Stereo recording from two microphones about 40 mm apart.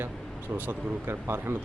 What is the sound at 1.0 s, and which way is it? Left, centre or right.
Speech, right.